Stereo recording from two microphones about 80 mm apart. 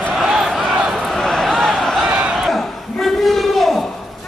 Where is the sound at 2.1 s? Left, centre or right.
Centre.